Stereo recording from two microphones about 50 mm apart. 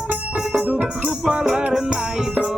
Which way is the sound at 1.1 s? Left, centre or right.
Centre.